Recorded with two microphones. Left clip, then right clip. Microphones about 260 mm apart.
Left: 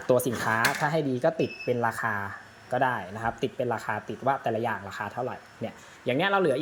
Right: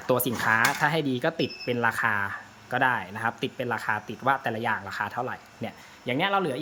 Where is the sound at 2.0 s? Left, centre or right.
Centre.